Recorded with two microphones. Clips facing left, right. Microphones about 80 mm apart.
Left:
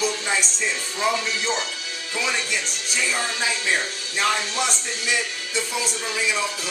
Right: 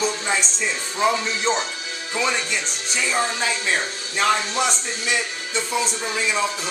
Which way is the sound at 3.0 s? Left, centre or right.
Right.